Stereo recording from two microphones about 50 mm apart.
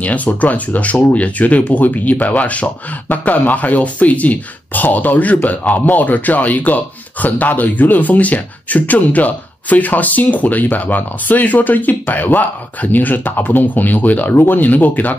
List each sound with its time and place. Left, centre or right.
0.0 s speech: left